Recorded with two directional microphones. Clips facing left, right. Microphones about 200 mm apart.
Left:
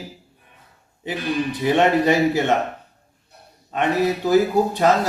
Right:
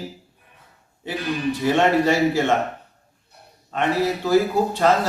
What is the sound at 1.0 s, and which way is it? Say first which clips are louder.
Speech: left 1 dB; 20° left (ahead or behind).